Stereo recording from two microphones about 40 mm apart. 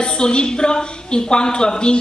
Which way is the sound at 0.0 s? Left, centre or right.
Left.